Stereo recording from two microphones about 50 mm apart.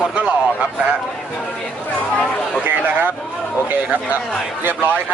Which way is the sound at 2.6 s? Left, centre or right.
Right.